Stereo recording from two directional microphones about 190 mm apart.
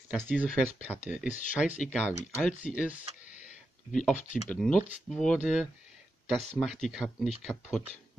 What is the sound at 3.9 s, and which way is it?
Speech, centre (ahead or behind).